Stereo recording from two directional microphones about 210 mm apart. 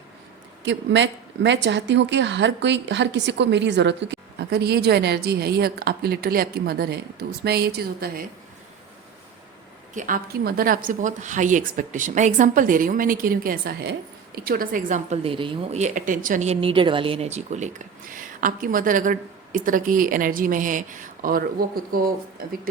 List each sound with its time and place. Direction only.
0.6 s a woman's voice: 60° right (ahead or behind)
9.9 s a woman's voice: 40° right (ahead or behind)